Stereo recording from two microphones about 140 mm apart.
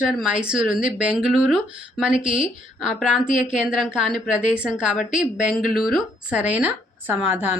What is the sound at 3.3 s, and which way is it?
Speech, 60° left (ahead or behind).